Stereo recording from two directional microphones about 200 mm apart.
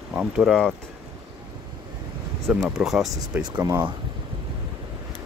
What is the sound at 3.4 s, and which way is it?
Speech, 15° right (ahead or behind).